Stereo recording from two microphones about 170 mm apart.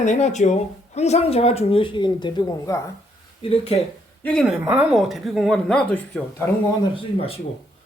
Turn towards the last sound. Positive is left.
turn(degrees=35)  # may be behind; listen again after turning